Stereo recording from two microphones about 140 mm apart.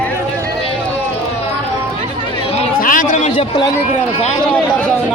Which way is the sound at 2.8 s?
70° left (ahead or behind).